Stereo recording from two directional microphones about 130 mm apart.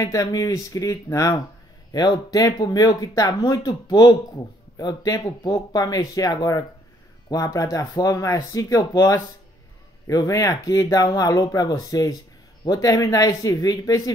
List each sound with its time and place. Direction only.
0.0 s speech: 25° left (ahead or behind)